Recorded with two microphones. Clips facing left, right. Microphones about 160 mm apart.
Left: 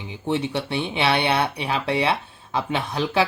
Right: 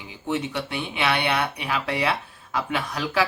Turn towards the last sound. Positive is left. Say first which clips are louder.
# left 3 dB
turn(degrees=25)  # may be behind; listen again after turning